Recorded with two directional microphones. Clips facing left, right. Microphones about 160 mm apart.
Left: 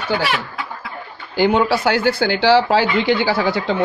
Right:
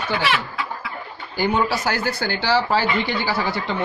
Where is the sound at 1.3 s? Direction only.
85° left.